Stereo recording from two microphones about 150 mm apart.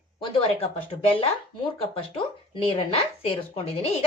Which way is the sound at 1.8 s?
40° left (ahead or behind).